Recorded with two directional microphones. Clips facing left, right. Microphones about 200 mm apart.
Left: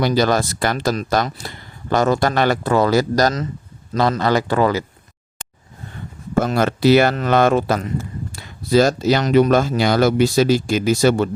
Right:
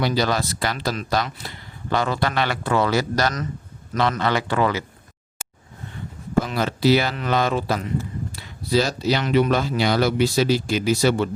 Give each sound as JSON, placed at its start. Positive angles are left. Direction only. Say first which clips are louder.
{"t": 0.0, "sound": "speech", "louder": "left 5 dB", "side_deg": 45}
{"t": 6.6, "sound": "speech", "louder": "left 6 dB", "side_deg": 55}